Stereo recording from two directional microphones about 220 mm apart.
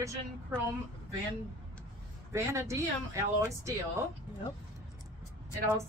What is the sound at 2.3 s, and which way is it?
A woman's voice, 15° right (ahead or behind).